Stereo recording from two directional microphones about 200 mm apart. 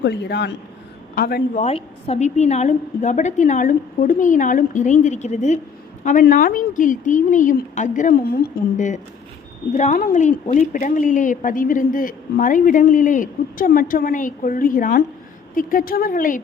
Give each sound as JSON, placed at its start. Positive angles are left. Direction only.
{"t": 0.0, "sound": "a woman's voice", "side_deg": 55}
{"t": 1.5, "sound": "a woman's voice", "side_deg": 30}